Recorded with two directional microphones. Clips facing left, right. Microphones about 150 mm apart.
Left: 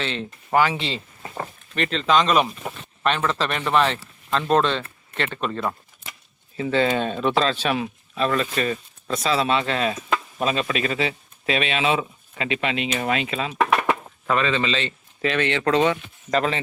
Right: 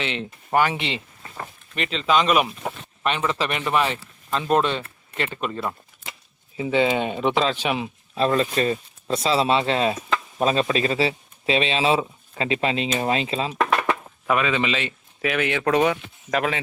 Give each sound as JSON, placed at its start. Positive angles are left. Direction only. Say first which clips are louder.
{"t": 0.7, "sound": "speech", "louder": "even", "side_deg": -20}
{"t": 1.7, "sound": "speech", "louder": "left 1 dB", "side_deg": -5}
{"t": 6.6, "sound": "speech", "louder": "even", "side_deg": -15}
{"t": 8.1, "sound": "speech", "louder": "right 2 dB", "side_deg": -30}
{"t": 14.3, "sound": "speech", "louder": "even", "side_deg": -10}